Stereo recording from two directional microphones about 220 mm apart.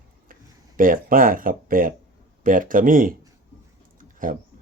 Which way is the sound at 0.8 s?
40° right (ahead or behind).